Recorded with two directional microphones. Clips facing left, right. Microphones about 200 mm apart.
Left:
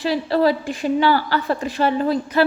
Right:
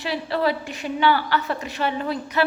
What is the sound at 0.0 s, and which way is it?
A woman's voice, 40° left (ahead or behind).